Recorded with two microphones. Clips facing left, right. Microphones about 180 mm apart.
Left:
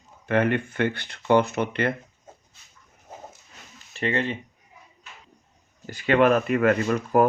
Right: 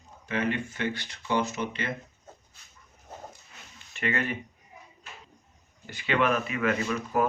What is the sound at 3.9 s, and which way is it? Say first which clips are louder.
Speech: left 4 dB; 30° left (ahead or behind).